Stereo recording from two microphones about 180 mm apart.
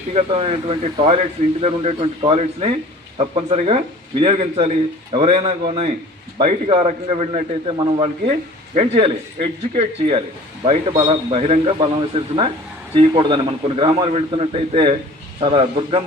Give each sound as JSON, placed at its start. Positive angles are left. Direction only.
{"t": 0.1, "sound": "speech", "side_deg": -35}